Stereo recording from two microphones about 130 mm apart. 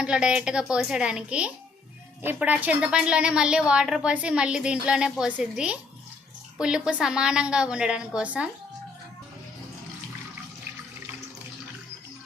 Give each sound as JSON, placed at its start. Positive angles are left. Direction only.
{"t": 0.0, "sound": "a woman's voice", "side_deg": -5}